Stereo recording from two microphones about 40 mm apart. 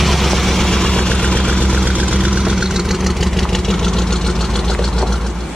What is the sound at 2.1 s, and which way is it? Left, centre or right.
Vehicle, right.